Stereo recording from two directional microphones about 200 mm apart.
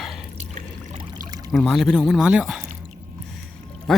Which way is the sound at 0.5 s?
35° right (ahead or behind).